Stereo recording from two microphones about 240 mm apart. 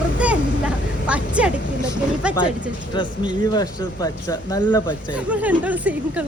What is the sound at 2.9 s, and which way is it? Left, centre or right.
Speech, centre.